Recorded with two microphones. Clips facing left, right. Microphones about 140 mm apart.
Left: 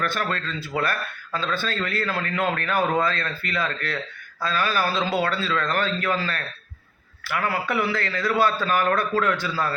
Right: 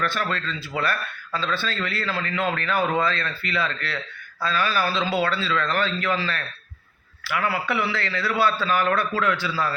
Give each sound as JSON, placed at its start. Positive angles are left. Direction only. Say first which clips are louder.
{"t": 0.0, "sound": "a man's voice", "louder": "even", "side_deg": 45}